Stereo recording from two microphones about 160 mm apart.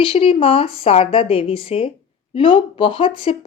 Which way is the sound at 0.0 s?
35° left (ahead or behind).